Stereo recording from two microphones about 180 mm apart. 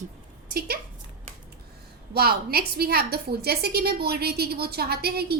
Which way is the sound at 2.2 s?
60° right (ahead or behind).